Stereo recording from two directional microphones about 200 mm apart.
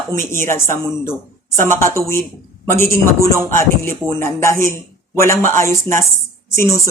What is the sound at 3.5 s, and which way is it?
A woman's voice, 10° left (ahead or behind).